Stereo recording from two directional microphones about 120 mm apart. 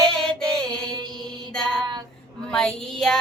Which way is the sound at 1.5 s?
5° left (ahead or behind).